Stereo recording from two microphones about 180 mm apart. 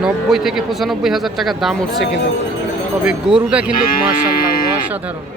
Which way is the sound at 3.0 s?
5° right (ahead or behind).